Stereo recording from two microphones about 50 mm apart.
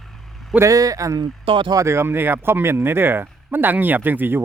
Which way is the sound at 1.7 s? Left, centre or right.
Right.